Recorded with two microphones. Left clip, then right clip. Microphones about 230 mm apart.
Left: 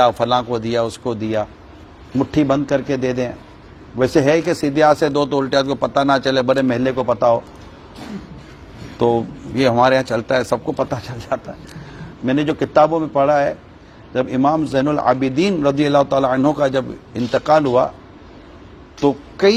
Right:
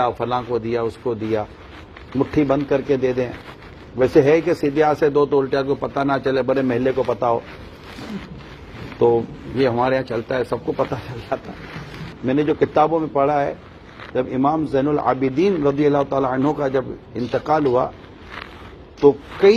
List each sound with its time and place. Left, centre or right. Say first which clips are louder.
0.0 s a man's voice: left 6 dB; left
9.0 s a man's voice: even; left
19.0 s a man's voice: right 2 dB; left